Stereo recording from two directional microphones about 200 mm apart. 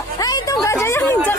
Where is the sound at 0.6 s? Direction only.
15° left (ahead or behind).